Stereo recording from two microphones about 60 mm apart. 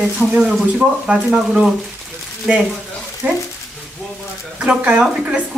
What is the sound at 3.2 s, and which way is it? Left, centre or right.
Speech, right.